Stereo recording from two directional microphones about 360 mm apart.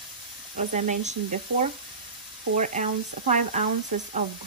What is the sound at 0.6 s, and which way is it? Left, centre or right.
Speech, centre.